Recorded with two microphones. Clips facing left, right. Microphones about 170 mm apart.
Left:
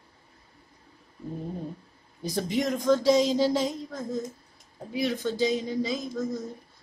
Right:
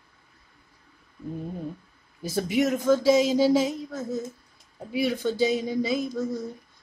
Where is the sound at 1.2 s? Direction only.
35° left (ahead or behind).